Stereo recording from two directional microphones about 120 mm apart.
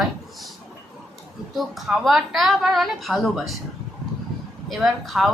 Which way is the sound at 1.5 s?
Centre (ahead or behind).